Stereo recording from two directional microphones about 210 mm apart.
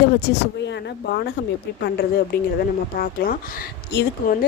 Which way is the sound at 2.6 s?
45° left (ahead or behind).